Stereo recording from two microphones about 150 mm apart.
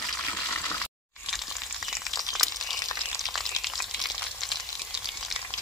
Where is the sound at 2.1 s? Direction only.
Centre (ahead or behind).